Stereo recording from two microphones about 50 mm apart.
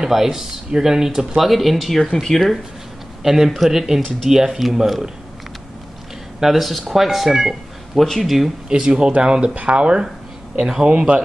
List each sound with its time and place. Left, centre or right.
0.0 s speech: centre
6.4 s speech: centre
8.6 s speech: centre